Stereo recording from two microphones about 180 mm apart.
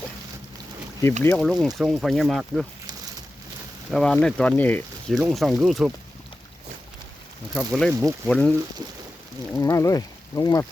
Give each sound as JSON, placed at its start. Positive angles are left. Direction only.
{"t": 1.2, "sound": "speech", "side_deg": 10}
{"t": 1.5, "sound": "speech", "side_deg": 0}
{"t": 3.9, "sound": "speech", "side_deg": 5}
{"t": 7.5, "sound": "speech", "side_deg": 0}
{"t": 9.6, "sound": "speech", "side_deg": 15}